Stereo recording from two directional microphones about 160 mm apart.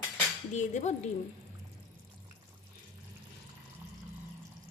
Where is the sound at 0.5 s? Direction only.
45° left (ahead or behind).